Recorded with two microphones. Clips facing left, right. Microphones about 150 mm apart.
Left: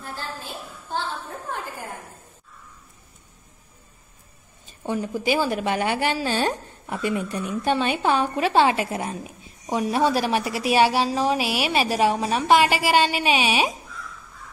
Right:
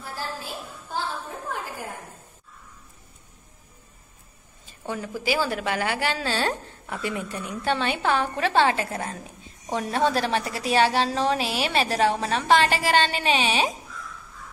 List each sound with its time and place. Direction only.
4.8 s a woman's voice: 20° left (ahead or behind)